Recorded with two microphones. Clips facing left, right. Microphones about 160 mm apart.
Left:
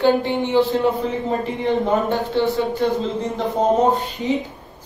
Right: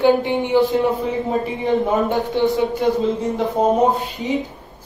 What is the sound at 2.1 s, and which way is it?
Speech, 15° right (ahead or behind).